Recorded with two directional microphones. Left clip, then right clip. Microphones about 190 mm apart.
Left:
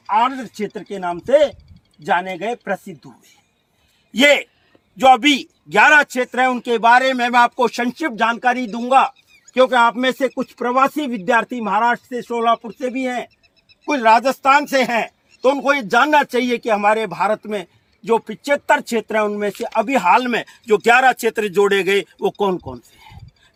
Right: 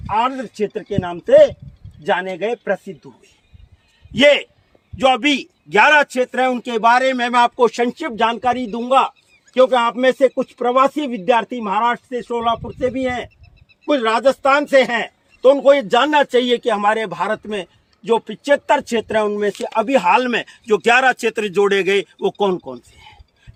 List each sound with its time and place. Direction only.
0.9 s a man's voice: 25° left (ahead or behind)
4.1 s a man's voice: 25° left (ahead or behind)
7.6 s a man's voice: 35° left (ahead or behind); by 22.8 s 10° left (ahead or behind)